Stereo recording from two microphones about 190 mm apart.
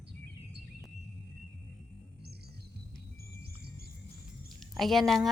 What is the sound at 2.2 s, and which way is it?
Music, 55° right (ahead or behind).